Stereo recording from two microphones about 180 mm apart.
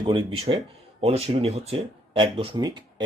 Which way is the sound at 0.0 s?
30° right (ahead or behind).